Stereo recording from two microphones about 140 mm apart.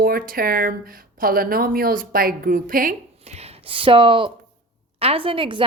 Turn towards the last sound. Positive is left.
turn(degrees=-35)  # may be behind; listen again after turning